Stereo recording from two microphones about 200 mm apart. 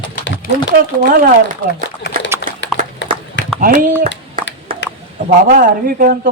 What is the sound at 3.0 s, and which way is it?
Horse, 65° left (ahead or behind).